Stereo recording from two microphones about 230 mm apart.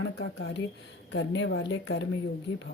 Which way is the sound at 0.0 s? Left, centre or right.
Left.